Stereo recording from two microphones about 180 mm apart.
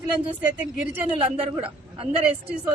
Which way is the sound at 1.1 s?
30° right (ahead or behind).